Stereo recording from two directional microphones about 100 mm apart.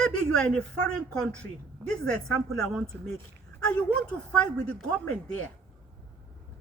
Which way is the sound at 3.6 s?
10° left (ahead or behind).